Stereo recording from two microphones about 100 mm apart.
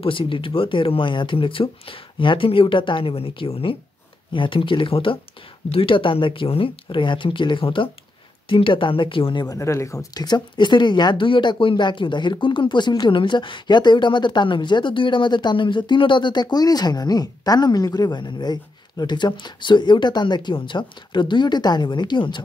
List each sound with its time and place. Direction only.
0.0 s speech: 60° left (ahead or behind)
9.5 s speech: 30° left (ahead or behind)
10.2 s speech: 50° left (ahead or behind)